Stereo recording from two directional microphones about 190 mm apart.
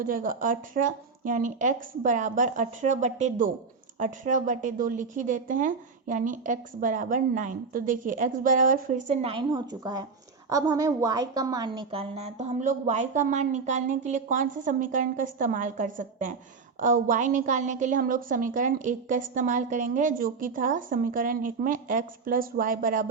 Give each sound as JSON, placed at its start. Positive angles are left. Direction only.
{"t": 0.0, "sound": "a woman's voice", "side_deg": -45}
{"t": 9.3, "sound": "a woman's voice", "side_deg": -25}